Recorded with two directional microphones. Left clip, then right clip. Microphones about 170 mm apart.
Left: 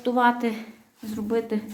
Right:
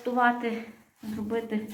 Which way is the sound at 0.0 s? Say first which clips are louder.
Left 3 dB; 45° left (ahead or behind).